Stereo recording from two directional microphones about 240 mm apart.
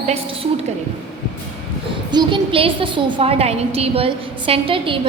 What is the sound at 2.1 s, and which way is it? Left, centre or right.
A woman's voice, centre.